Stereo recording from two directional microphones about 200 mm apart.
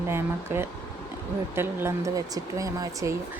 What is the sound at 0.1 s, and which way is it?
Speech, 10° right (ahead or behind).